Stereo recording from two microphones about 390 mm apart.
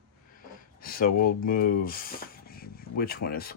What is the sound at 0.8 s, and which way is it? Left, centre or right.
Speech, left.